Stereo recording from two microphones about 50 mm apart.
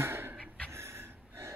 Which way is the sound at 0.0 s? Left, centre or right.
Right.